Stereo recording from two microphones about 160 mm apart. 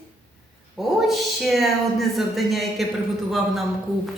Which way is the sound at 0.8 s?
Centre (ahead or behind).